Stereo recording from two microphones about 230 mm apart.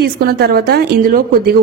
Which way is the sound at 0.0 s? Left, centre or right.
Right.